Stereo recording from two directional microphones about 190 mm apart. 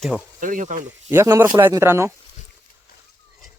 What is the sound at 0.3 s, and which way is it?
Speech, 45° right (ahead or behind).